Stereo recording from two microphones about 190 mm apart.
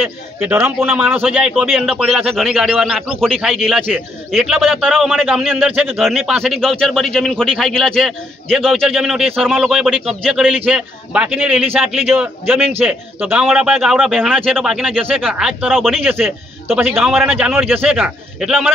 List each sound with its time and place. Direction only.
0.0 s a man's voice: 10° right (ahead or behind)
16.0 s a man's voice: 10° right (ahead or behind)